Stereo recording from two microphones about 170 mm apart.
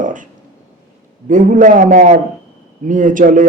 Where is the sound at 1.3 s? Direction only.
50° right (ahead or behind).